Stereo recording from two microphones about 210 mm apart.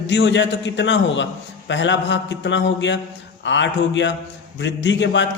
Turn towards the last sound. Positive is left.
turn(degrees=60)  # may be behind; listen again after turning